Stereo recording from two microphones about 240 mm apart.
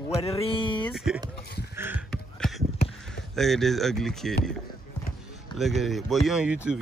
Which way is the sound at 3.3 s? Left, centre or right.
Centre.